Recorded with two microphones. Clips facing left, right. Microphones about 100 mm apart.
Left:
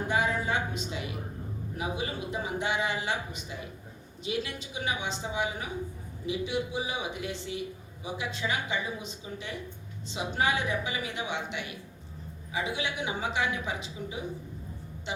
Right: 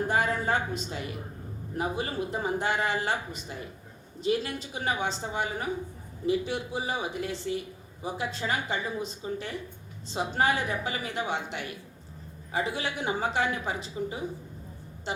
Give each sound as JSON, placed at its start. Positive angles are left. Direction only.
{"t": 0.1, "sound": "a man's voice", "side_deg": -45}